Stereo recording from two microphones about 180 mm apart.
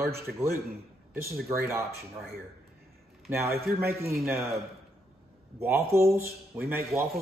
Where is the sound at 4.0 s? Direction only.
15° right (ahead or behind).